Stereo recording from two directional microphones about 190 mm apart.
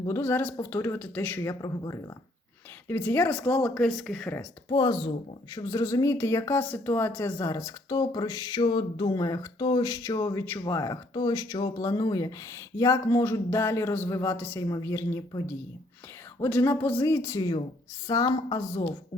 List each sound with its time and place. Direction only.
0.1 s speech: 10° left (ahead or behind)
4.7 s speech: 20° left (ahead or behind)